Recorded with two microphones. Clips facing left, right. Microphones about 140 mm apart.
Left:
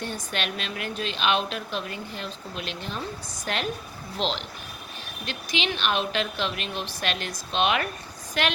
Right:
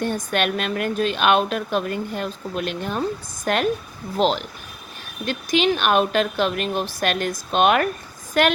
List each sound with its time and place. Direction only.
0.0 s a woman's voice: 50° right (ahead or behind)